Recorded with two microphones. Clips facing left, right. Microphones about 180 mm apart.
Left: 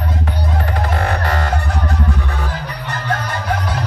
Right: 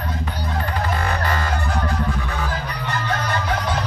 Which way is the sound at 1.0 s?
70° left (ahead or behind).